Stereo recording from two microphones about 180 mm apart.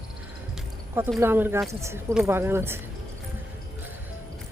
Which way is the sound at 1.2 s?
10° right (ahead or behind).